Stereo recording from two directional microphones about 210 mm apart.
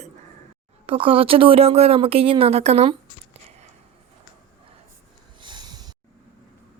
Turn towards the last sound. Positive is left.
turn(degrees=-20)  # may be behind; listen again after turning